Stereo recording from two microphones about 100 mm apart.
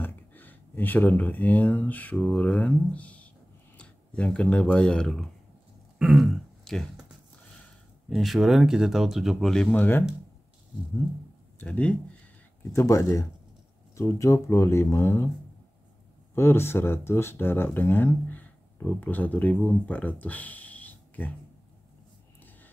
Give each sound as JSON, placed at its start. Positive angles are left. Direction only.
{"t": 0.0, "sound": "speech", "side_deg": 20}
{"t": 8.1, "sound": "speech", "side_deg": 0}
{"t": 9.8, "sound": "speech", "side_deg": 20}
{"t": 11.6, "sound": "speech", "side_deg": 15}
{"t": 12.7, "sound": "speech", "side_deg": 30}
{"t": 16.3, "sound": "speech", "side_deg": 25}